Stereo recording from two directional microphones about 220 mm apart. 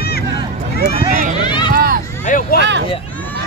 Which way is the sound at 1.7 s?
40° right (ahead or behind).